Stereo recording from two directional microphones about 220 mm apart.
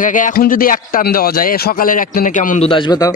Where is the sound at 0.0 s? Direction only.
35° left (ahead or behind); by 3.2 s 20° left (ahead or behind).